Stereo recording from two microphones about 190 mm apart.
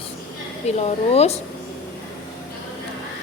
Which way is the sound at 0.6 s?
35° left (ahead or behind).